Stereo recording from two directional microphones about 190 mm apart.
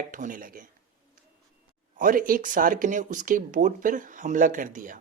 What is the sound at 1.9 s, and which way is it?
Speech, 45° right (ahead or behind).